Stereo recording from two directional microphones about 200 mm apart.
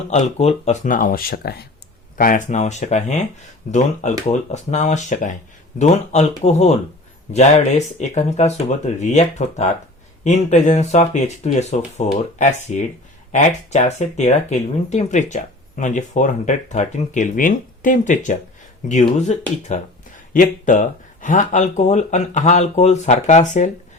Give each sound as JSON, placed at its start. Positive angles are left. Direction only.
{"t": 0.1, "sound": "speech", "side_deg": 35}